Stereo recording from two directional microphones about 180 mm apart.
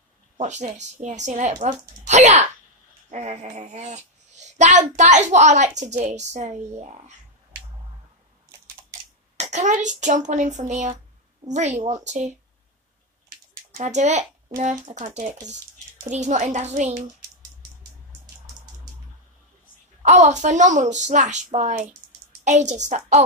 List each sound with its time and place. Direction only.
0.4 s a child's voice: 40° right (ahead or behind)
9.4 s a child's voice: 40° right (ahead or behind)
13.7 s a child's voice: 40° right (ahead or behind)
20.0 s a child's voice: 40° right (ahead or behind)